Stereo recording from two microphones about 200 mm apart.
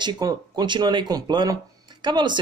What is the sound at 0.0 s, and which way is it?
Speech, 20° right (ahead or behind).